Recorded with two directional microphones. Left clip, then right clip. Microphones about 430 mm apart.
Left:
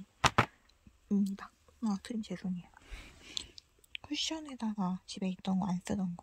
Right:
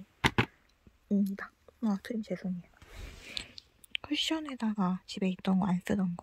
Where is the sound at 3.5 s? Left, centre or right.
Centre.